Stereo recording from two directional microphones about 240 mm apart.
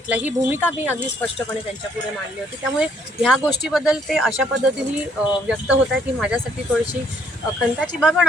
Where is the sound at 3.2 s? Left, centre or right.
Centre.